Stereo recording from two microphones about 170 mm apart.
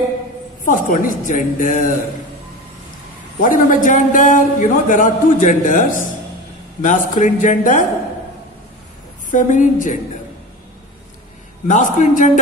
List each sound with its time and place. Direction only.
0.7 s a man's voice: 50° left (ahead or behind)
3.3 s a man's voice: 50° left (ahead or behind)
9.3 s a man's voice: 50° left (ahead or behind)
11.6 s a man's voice: 50° left (ahead or behind)